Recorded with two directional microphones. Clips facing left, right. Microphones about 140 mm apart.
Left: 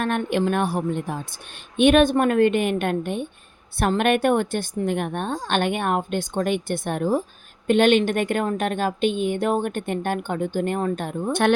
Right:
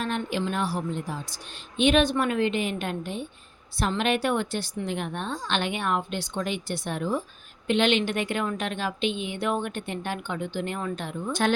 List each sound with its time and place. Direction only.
0.0 s a woman's voice: 55° left (ahead or behind)
11.3 s a woman's voice: 60° left (ahead or behind)